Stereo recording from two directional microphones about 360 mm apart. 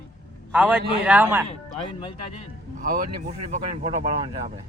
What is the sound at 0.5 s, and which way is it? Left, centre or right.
Speech, centre.